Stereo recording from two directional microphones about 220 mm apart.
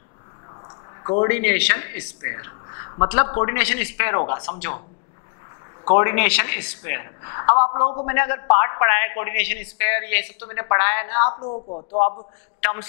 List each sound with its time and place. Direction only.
1.0 s a man's voice: 20° left (ahead or behind)
3.5 s a man's voice: 10° left (ahead or behind)
5.9 s a man's voice: 15° left (ahead or behind)
11.2 s speech: 30° left (ahead or behind)